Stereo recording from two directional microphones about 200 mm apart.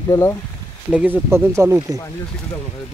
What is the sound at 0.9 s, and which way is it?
Speech, 5° right (ahead or behind).